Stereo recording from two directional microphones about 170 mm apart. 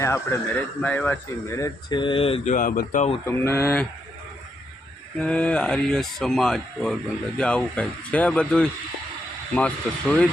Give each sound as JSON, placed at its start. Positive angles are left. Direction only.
{"t": 0.0, "sound": "speech", "side_deg": 15}
{"t": 3.2, "sound": "speech", "side_deg": 15}
{"t": 5.2, "sound": "speech", "side_deg": 5}